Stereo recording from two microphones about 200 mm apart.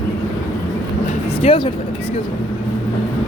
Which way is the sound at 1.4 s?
25° left (ahead or behind).